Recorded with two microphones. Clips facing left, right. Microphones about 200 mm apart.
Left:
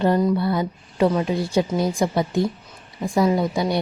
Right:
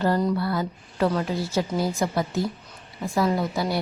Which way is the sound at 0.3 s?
20° left (ahead or behind).